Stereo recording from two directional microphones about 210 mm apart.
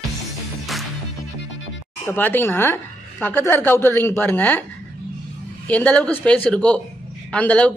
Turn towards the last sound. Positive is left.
turn(degrees=5)  # may be behind; listen again after turning